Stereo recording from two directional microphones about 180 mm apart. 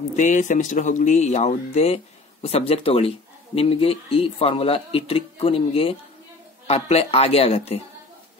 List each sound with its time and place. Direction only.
0.1 s speech: 45° left (ahead or behind)